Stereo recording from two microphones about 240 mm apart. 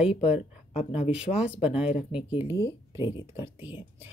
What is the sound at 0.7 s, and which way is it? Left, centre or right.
Speech, left.